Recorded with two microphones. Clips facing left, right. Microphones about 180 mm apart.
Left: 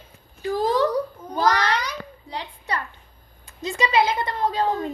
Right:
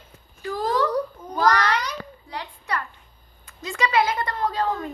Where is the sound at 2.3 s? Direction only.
25° left (ahead or behind).